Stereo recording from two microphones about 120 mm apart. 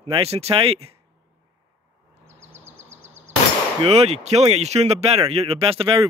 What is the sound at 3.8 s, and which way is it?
Speech, 60° right (ahead or behind).